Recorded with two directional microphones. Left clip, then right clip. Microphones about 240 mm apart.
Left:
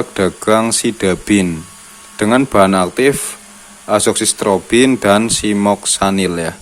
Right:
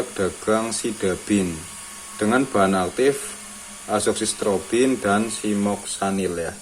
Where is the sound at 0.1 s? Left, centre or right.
Left.